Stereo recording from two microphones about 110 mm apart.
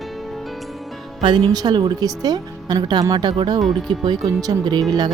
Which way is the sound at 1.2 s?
45° right (ahead or behind).